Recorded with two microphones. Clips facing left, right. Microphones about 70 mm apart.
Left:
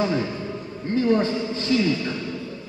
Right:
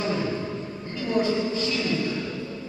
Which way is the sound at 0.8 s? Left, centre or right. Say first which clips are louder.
Left 5 dB; left.